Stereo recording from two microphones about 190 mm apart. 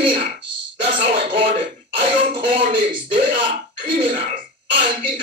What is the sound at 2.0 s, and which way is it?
Throat clearing, 30° right (ahead or behind).